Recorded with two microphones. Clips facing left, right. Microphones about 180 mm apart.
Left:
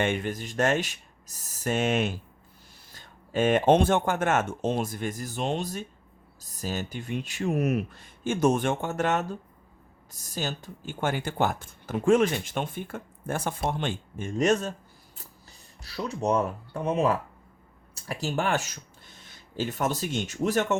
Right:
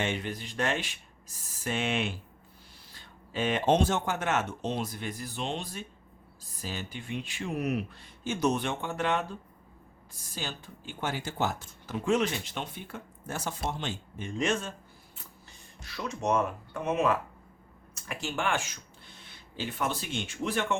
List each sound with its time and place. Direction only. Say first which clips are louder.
0.0 s speech: left 5 dB; 50° left (ahead or behind)
15.8 s speech: left 4 dB; 35° left (ahead or behind)